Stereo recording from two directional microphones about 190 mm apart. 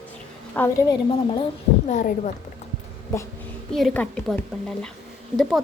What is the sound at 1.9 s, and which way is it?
Speech, 40° left (ahead or behind).